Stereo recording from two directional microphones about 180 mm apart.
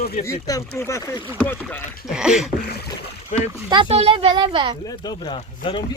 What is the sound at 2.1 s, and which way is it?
Speech, 5° right (ahead or behind).